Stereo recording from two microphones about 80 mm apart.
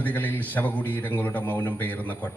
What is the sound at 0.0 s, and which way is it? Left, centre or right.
A man's voice, left.